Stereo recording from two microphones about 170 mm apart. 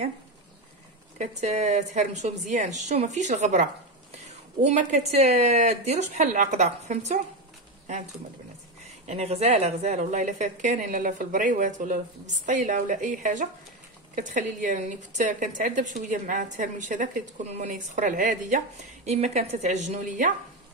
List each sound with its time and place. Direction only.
1.1 s a woman's voice: 45° right (ahead or behind)
9.0 s a woman's voice: 40° right (ahead or behind)